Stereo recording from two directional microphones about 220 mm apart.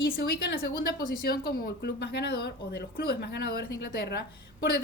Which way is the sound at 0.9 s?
40° left (ahead or behind).